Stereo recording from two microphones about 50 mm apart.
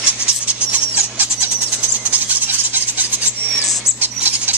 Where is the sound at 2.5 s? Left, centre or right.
Right.